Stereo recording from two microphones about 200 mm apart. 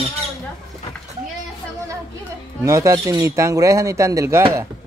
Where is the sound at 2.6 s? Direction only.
15° right (ahead or behind).